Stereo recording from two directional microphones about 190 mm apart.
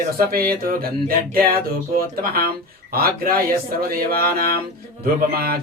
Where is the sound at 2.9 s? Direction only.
50° right (ahead or behind).